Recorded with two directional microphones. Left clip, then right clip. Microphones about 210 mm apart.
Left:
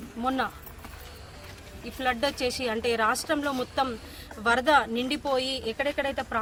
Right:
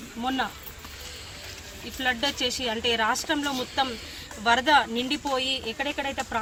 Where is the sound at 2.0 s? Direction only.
20° left (ahead or behind).